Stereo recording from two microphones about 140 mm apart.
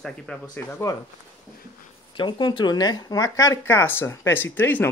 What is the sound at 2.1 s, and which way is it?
Speech, 35° left (ahead or behind).